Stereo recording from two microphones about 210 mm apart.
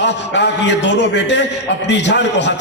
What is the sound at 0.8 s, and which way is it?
A man's voice, 60° left (ahead or behind).